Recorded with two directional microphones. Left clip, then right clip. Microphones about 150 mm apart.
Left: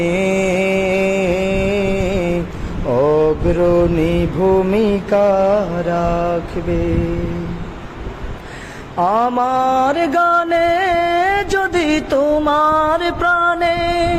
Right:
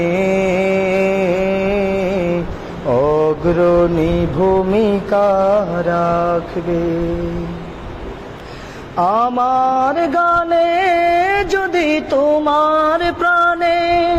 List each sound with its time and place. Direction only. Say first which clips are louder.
0.0 s music: right 1 dB; 20° left (ahead or behind)
1.0 s a sound: right 1 dB; 20° left (ahead or behind)
2.9 s mantra: even; 5° right (ahead or behind); by 6.9 s 10° left (ahead or behind)
9.0 s a sound: even; centre (ahead or behind)
9.4 s music: right 1 dB; 10° left (ahead or behind)
12.8 s music: right 1 dB; centre (ahead or behind)
13.9 s music: right 3 dB; 15° left (ahead or behind)